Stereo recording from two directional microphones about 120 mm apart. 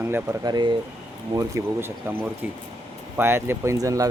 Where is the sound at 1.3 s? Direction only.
25° right (ahead or behind).